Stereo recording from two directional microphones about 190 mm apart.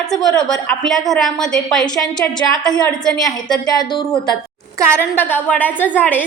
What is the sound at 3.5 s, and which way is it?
Speech, 20° left (ahead or behind).